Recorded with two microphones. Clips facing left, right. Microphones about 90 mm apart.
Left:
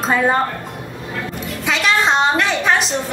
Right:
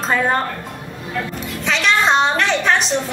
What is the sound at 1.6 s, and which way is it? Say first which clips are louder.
A woman's voice: even; 5° left (ahead or behind).